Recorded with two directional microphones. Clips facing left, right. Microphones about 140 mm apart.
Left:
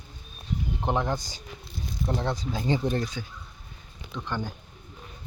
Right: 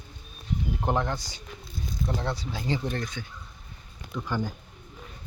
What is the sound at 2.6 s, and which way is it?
Speech, 20° left (ahead or behind).